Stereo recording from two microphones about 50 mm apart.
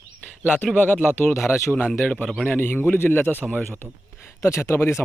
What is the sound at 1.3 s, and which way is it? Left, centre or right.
Speech, left.